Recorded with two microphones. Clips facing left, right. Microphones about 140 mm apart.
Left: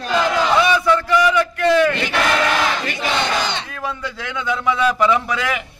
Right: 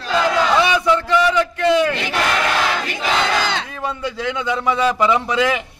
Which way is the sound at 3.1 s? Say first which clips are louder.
Right 2 dB; 90° right.